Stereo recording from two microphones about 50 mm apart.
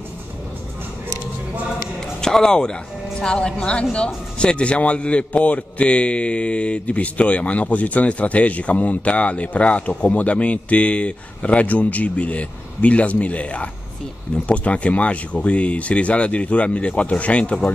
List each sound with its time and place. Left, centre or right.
2.0 s speech: centre